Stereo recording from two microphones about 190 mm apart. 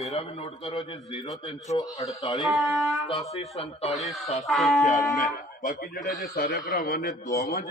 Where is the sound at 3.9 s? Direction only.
Centre (ahead or behind).